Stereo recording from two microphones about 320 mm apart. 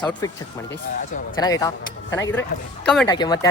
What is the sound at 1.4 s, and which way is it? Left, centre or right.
Speech, centre.